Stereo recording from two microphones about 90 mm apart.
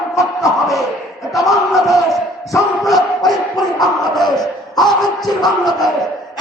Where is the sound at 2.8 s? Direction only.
Centre (ahead or behind).